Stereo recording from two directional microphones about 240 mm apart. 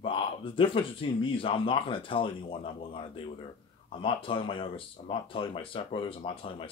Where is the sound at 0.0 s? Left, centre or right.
Left.